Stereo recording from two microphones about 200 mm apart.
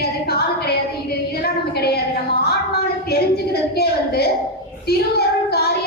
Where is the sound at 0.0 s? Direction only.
50° left (ahead or behind).